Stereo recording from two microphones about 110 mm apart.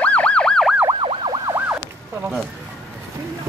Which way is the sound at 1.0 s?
50° right (ahead or behind).